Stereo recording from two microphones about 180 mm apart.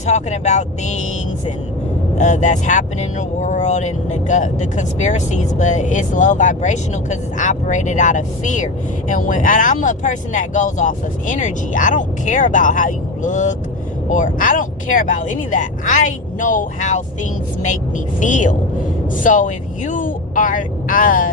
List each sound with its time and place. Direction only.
0.0 s speech: 40° left (ahead or behind)
2.1 s speech: 40° left (ahead or behind)
18.2 s speech: 45° left (ahead or behind)